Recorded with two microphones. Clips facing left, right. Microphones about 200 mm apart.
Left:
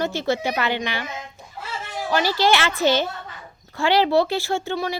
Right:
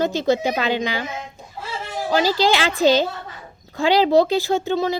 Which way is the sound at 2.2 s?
15° right (ahead or behind).